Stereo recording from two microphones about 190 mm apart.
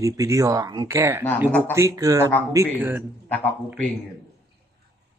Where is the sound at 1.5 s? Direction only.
5° left (ahead or behind).